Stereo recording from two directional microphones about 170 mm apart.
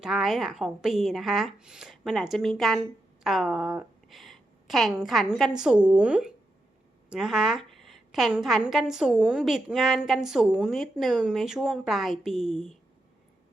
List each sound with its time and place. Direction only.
0.0 s a woman's voice: centre (ahead or behind)